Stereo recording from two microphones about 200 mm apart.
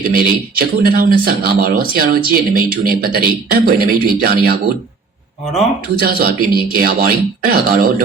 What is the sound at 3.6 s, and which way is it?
Speech, 45° right (ahead or behind).